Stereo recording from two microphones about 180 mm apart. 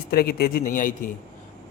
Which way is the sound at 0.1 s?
60° left (ahead or behind).